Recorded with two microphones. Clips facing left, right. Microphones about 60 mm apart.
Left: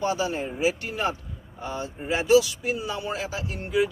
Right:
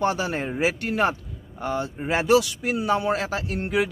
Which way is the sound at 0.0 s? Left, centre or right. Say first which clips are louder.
Right 2 dB; right.